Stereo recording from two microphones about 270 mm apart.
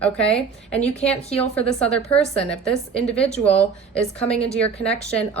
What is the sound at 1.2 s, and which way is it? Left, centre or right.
Speech, left.